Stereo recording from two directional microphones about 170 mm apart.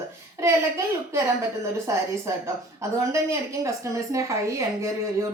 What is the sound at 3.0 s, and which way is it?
A woman's voice, 15° right (ahead or behind).